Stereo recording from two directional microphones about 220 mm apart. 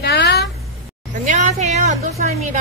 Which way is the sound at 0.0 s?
50° left (ahead or behind).